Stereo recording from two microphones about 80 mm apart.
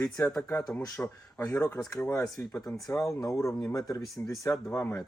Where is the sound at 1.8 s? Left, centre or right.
Left.